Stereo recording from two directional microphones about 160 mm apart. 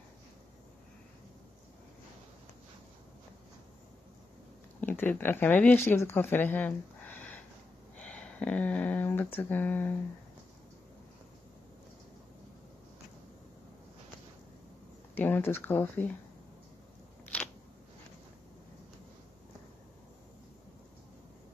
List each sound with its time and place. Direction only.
4.7 s speech: 10° left (ahead or behind)
8.0 s a sound: 10° left (ahead or behind)
15.1 s speech: 10° left (ahead or behind)